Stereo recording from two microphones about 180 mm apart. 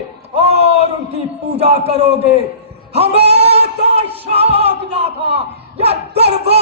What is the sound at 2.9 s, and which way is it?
Music, 35° right (ahead or behind).